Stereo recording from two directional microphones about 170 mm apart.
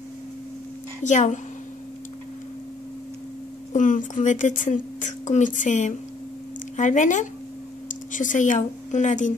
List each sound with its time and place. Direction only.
1.0 s speech: 45° left (ahead or behind)
3.7 s speech: 50° left (ahead or behind)